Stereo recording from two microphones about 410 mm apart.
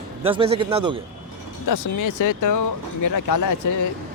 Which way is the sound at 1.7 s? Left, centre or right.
Left.